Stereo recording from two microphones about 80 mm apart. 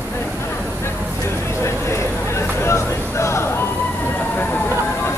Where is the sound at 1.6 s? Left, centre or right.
Left.